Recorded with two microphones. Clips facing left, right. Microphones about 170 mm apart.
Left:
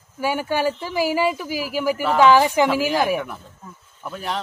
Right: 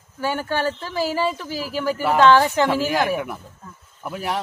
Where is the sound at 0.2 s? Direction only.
10° left (ahead or behind).